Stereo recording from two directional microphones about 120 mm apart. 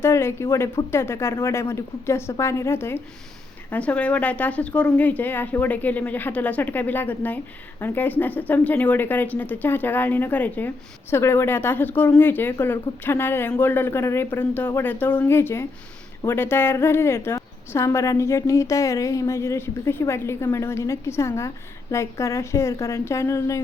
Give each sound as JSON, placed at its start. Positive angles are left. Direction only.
{"t": 0.0, "sound": "a woman's voice", "side_deg": 20}